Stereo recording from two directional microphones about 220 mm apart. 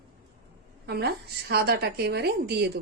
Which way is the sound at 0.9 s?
50° right (ahead or behind).